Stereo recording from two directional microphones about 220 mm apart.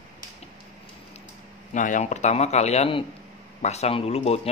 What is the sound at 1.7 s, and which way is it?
Speech, 35° left (ahead or behind).